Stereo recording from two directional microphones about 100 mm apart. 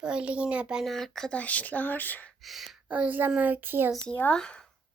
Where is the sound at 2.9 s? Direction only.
15° right (ahead or behind).